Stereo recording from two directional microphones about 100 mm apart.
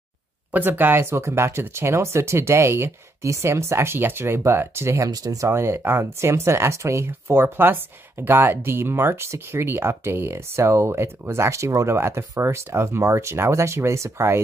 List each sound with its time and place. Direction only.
0.5 s speech: 20° right (ahead or behind); by 5.5 s 35° right (ahead or behind)
5.5 s speech: 25° right (ahead or behind)